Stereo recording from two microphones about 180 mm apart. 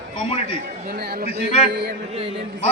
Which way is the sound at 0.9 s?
55° right (ahead or behind).